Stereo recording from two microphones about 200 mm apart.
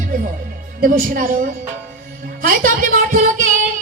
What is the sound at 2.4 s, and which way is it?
A woman's voice, 45° right (ahead or behind).